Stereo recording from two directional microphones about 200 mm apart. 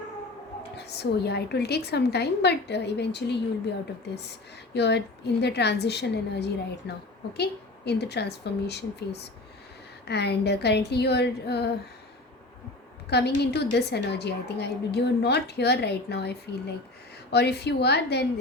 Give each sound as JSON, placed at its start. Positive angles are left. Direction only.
{"t": 0.8, "sound": "a woman's voice", "side_deg": 55}
{"t": 4.7, "sound": "a woman's voice", "side_deg": 55}
{"t": 13.1, "sound": "a woman's voice", "side_deg": 55}